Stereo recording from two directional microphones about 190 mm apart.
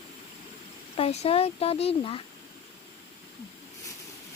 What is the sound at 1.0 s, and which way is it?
Speech, 30° left (ahead or behind).